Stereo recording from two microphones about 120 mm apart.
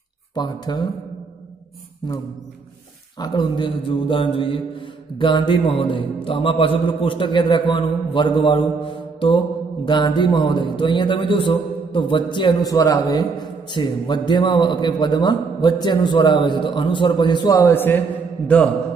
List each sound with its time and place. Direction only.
0.3 s a man's voice: 35° left (ahead or behind)
3.2 s music: 40° left (ahead or behind)
9.8 s a man's voice: 40° left (ahead or behind)
17.6 s a man's voice: 20° left (ahead or behind)